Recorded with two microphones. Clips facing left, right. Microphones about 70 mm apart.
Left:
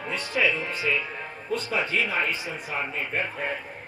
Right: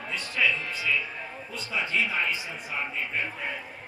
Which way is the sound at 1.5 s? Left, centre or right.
Left.